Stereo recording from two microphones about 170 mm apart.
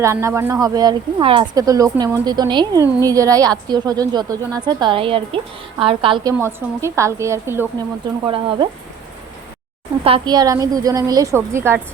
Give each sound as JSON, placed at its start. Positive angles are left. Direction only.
{"t": 0.0, "sound": "a woman's voice", "side_deg": -15}
{"t": 6.4, "sound": "a woman's voice", "side_deg": -15}
{"t": 8.3, "sound": "a woman's voice", "side_deg": -30}
{"t": 10.0, "sound": "speech", "side_deg": -30}